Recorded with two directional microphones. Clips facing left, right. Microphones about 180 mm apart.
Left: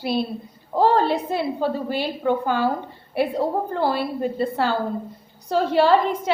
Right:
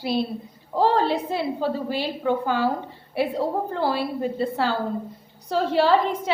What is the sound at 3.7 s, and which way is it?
A woman's voice, 55° left (ahead or behind).